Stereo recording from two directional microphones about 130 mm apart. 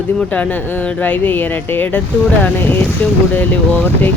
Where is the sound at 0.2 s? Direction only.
10° left (ahead or behind).